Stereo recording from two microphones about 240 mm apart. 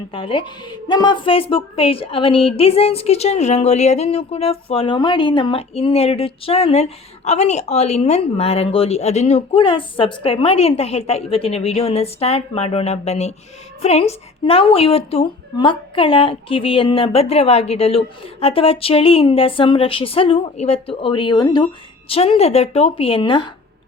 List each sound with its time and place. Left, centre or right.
0.1 s a woman's voice: left